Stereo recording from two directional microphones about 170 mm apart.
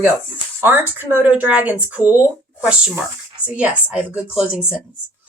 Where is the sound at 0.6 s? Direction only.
10° right (ahead or behind).